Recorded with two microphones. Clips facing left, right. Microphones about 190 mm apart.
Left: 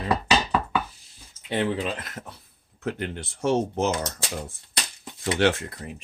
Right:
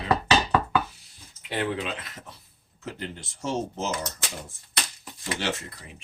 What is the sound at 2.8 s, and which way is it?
Speech, 60° left (ahead or behind).